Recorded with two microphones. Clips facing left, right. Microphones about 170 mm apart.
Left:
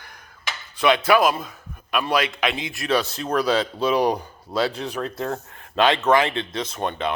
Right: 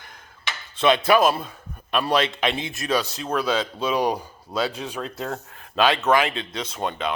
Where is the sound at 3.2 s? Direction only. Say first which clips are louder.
Left 2 dB; centre (ahead or behind).